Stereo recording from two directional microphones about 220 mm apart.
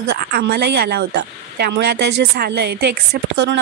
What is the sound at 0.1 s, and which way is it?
Speech, 50° right (ahead or behind).